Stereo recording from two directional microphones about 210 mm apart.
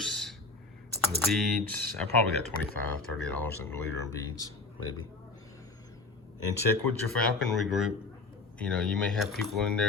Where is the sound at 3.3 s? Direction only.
10° left (ahead or behind).